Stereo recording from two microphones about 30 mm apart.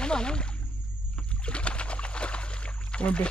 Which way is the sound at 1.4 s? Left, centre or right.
Left.